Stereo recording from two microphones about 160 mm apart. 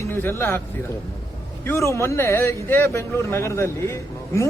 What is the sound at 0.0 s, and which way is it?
A man's voice, 15° left (ahead or behind).